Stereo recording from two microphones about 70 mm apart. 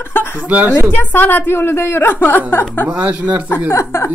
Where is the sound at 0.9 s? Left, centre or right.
Left.